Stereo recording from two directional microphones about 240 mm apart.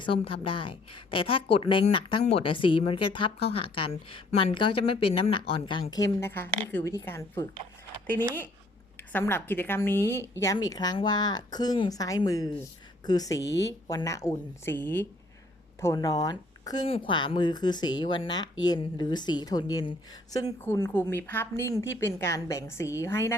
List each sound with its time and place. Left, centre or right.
0.0 s a woman's voice: left